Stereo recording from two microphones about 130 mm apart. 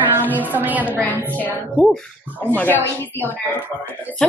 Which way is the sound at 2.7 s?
20° right (ahead or behind).